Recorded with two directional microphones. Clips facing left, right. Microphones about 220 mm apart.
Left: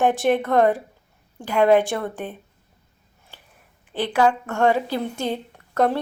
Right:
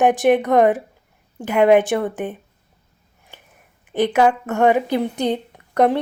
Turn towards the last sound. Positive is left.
turn(degrees=-15)  # may be behind; listen again after turning